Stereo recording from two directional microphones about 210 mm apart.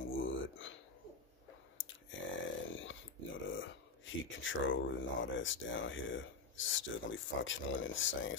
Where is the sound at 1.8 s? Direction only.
65° left (ahead or behind).